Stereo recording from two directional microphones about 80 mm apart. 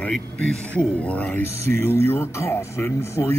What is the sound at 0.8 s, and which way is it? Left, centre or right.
Speech, centre.